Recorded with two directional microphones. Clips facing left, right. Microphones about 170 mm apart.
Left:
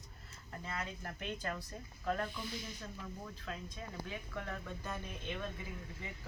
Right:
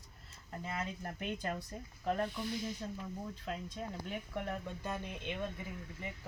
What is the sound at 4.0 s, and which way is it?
Speech, 20° right (ahead or behind).